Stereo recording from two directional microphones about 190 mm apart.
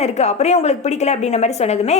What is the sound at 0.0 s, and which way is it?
A woman's voice, 35° left (ahead or behind).